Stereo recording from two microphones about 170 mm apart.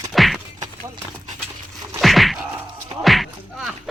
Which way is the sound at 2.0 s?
Centre (ahead or behind).